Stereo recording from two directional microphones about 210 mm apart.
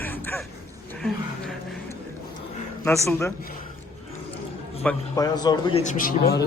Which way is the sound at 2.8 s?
15° left (ahead or behind).